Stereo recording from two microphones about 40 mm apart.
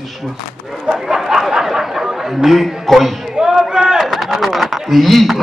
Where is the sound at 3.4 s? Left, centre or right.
Centre.